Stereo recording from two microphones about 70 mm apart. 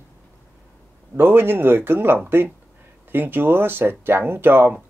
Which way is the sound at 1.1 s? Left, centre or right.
Right.